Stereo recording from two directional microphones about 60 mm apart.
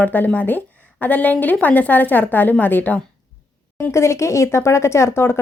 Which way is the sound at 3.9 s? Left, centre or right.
Left.